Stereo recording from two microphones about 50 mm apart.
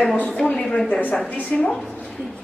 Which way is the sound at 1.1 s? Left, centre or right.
Centre.